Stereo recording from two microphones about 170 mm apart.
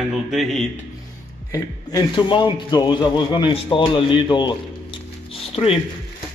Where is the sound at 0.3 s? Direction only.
Centre (ahead or behind).